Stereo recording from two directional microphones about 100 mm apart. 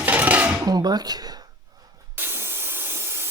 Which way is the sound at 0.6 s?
40° right (ahead or behind).